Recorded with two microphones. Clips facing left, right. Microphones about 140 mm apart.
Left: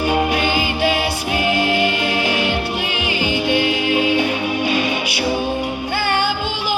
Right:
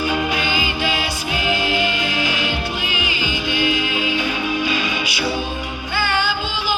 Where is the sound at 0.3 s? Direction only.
55° left (ahead or behind).